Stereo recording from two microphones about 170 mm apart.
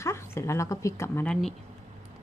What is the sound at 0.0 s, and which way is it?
A woman's voice, 15° left (ahead or behind).